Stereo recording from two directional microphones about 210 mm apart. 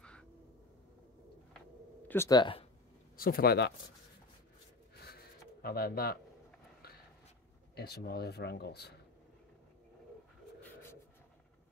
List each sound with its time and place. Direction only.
2.0 s speech: 15° left (ahead or behind)
3.2 s speech: 45° left (ahead or behind)
5.0 s a sound: 45° left (ahead or behind)
7.7 s speech: 50° left (ahead or behind)
10.6 s bird: 10° left (ahead or behind)